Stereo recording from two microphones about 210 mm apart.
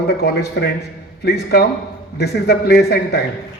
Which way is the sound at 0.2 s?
50° left (ahead or behind).